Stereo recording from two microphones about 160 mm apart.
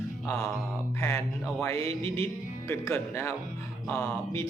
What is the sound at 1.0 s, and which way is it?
Speech, 15° left (ahead or behind).